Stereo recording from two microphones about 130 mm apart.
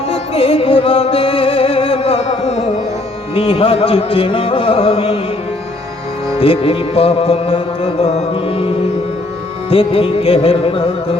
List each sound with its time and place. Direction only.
0.1 s music: 45° left (ahead or behind)
3.3 s carnatic music: 45° left (ahead or behind)
6.4 s carnatic music: 45° left (ahead or behind)
9.6 s carnatic music: 45° left (ahead or behind)